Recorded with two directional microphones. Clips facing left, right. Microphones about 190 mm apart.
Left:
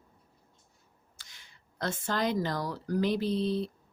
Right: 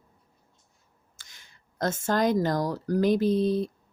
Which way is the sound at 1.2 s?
45° right (ahead or behind).